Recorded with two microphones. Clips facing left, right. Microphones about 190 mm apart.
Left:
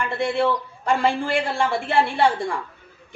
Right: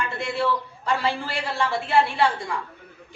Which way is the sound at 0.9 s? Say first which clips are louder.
Left 5 dB; 50° left (ahead or behind).